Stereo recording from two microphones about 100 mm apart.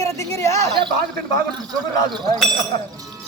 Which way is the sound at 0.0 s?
30° left (ahead or behind).